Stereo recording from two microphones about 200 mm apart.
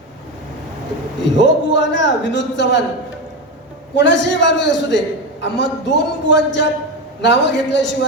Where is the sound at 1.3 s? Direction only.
65° left (ahead or behind).